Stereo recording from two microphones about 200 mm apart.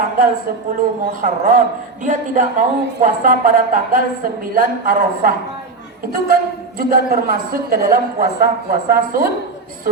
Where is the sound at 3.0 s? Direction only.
40° right (ahead or behind).